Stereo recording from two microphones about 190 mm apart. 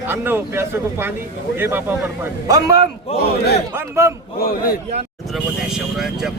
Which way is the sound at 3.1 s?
30° left (ahead or behind).